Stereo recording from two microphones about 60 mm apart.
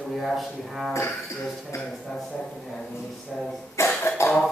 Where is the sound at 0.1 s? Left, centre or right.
Centre.